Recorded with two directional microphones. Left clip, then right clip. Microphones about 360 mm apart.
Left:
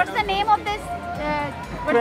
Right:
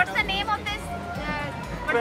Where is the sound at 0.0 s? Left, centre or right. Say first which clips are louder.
Left 3 dB; centre.